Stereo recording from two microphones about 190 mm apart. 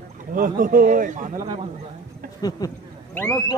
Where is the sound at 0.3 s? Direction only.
45° right (ahead or behind).